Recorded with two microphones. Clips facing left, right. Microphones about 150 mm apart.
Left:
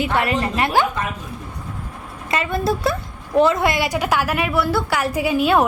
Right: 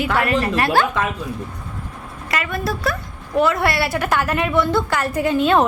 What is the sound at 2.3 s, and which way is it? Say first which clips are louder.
A woman's voice: left 3 dB; 25° left (ahead or behind).